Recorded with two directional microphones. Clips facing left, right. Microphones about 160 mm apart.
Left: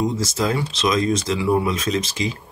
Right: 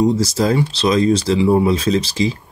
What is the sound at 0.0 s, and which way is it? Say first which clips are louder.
Speech: right 6 dB; 35° right (ahead or behind).